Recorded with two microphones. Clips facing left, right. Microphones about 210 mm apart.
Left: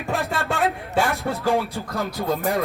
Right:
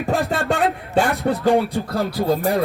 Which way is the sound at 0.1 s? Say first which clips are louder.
Right 4 dB; centre (ahead or behind).